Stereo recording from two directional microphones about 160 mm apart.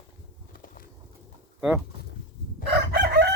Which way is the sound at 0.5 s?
60° left (ahead or behind).